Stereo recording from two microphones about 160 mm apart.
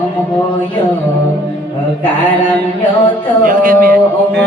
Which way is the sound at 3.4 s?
60° right (ahead or behind).